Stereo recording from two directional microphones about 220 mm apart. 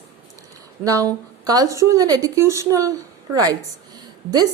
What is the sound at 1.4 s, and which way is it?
A woman's voice, 15° right (ahead or behind).